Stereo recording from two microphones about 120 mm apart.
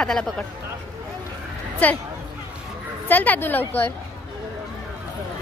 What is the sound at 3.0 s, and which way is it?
Speech, 15° left (ahead or behind).